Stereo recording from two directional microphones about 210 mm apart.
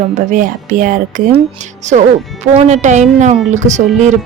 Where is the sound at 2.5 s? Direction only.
35° right (ahead or behind).